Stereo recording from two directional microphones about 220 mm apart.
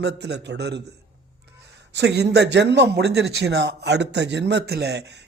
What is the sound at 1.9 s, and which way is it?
Speech, 50° right (ahead or behind).